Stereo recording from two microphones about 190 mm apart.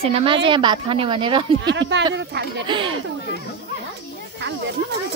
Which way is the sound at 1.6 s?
65° right (ahead or behind).